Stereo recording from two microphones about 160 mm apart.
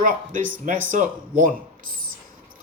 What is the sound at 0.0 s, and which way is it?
Speech, 55° right (ahead or behind).